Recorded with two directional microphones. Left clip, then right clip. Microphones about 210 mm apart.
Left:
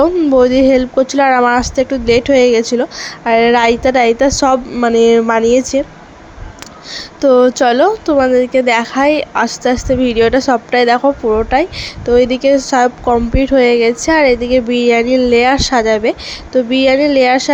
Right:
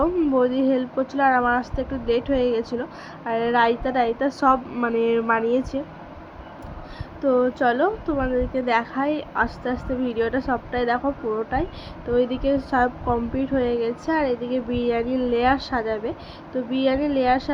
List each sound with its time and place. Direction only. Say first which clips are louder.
0.0 s speech: left 11 dB; 35° left (ahead or behind)
7.2 s speech: left 11 dB; 40° left (ahead or behind)